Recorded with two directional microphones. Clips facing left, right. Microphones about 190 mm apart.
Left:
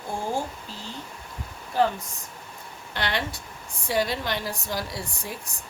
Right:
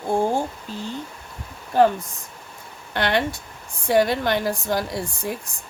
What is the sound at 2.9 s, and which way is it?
A woman's voice, 55° right (ahead or behind).